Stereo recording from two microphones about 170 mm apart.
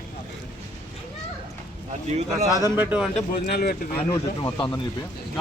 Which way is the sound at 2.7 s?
10° right (ahead or behind).